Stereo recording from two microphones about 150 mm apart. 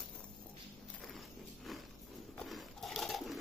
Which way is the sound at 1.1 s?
Centre (ahead or behind).